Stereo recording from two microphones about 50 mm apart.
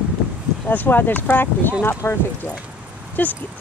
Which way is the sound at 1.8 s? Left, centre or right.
Left.